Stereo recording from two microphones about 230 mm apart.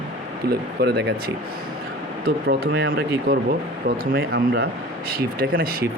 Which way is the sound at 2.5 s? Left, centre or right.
Right.